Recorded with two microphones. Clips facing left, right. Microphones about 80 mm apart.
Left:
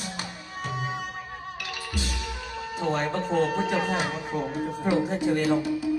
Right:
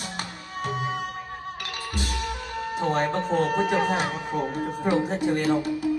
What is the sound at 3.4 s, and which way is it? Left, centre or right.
Speech, right.